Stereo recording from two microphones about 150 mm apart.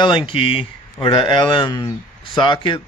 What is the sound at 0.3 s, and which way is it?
Speech, 40° left (ahead or behind).